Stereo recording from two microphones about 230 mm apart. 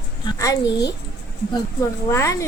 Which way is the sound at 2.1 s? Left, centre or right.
Centre.